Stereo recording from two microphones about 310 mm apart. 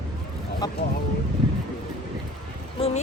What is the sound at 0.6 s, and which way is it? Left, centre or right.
Speech, centre.